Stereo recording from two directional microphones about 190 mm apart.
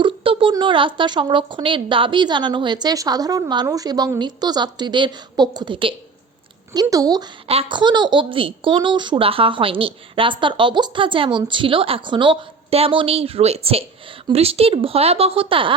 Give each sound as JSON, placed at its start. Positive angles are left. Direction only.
{"t": 0.0, "sound": "a woman's voice", "side_deg": -25}
{"t": 7.4, "sound": "a woman's voice", "side_deg": -30}